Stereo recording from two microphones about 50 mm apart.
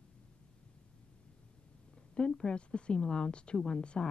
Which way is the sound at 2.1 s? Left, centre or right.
Centre.